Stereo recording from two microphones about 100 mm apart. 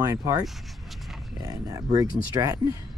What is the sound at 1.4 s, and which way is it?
Speech, 35° right (ahead or behind).